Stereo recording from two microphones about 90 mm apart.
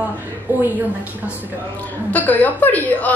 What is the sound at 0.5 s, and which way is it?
Speech, 20° right (ahead or behind).